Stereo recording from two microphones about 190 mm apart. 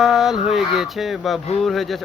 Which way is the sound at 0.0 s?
Centre (ahead or behind).